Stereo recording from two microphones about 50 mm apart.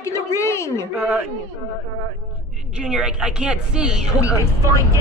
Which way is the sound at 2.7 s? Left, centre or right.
Centre.